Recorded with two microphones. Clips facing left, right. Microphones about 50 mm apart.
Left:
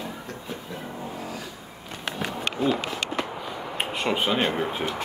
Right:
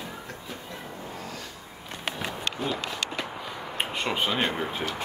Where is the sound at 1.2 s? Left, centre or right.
Centre.